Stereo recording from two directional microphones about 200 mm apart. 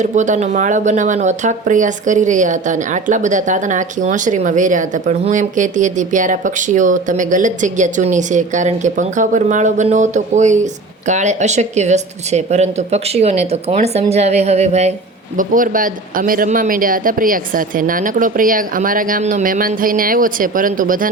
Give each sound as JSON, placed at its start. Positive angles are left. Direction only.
{"t": 0.0, "sound": "speech", "side_deg": -35}